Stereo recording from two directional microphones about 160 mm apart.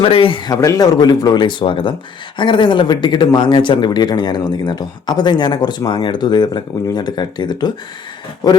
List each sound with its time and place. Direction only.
0.0 s speech: 35° left (ahead or behind)